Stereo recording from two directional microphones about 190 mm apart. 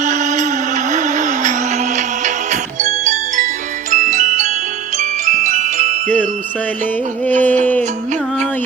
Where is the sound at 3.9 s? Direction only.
40° right (ahead or behind).